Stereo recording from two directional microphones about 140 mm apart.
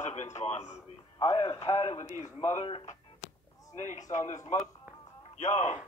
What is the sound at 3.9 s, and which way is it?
Speech, 60° left (ahead or behind).